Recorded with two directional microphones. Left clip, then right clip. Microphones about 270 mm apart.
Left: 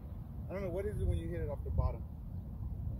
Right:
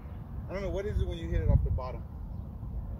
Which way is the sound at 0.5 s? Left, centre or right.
Centre.